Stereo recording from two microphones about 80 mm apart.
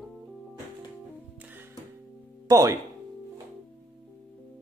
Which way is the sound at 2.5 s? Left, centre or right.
Right.